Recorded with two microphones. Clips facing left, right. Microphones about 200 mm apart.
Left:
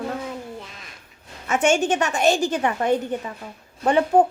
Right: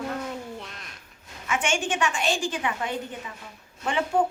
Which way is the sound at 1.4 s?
40° left (ahead or behind).